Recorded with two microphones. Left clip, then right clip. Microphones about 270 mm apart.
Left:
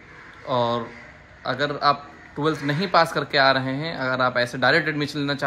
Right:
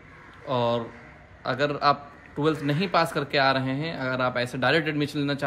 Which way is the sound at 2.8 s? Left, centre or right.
Centre.